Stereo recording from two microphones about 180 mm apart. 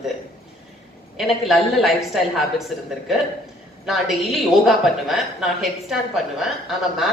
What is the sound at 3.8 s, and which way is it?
A woman's voice, centre (ahead or behind).